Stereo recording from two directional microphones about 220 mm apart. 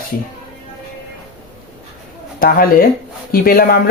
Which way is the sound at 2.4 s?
40° left (ahead or behind).